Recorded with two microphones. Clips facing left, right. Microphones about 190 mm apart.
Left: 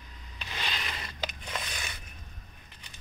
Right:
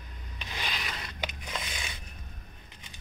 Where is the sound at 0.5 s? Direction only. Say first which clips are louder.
Even; 10° right (ahead or behind).